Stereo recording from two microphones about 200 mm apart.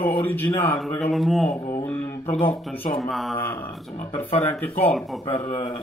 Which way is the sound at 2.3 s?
25° left (ahead or behind).